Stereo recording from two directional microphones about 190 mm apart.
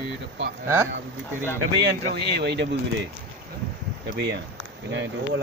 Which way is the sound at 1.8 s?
60° right (ahead or behind).